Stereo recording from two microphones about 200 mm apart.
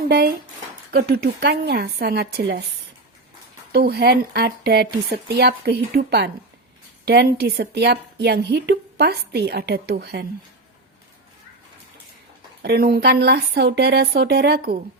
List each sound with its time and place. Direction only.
0.1 s speech: 50° right (ahead or behind)
3.7 s a woman's voice: 55° right (ahead or behind)
12.6 s speech: 50° right (ahead or behind)